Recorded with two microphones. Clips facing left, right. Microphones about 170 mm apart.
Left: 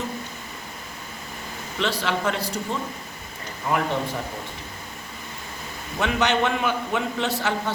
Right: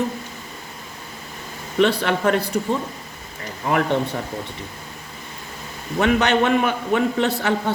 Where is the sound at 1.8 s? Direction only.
55° right (ahead or behind).